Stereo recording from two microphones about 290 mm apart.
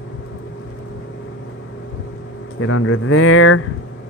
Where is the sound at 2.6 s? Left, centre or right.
Left.